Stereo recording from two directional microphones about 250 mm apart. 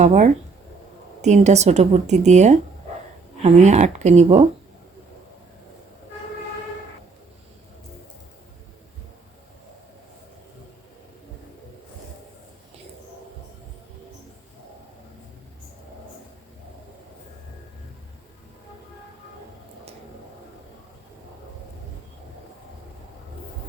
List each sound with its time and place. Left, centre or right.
0.0 s a woman's voice: right